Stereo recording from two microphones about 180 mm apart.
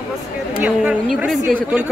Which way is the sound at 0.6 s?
5° right (ahead or behind).